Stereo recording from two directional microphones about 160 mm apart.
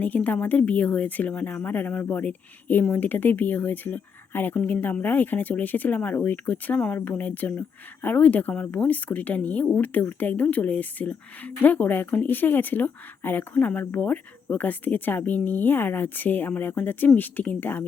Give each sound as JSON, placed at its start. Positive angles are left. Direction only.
{"t": 0.0, "sound": "speech", "side_deg": 10}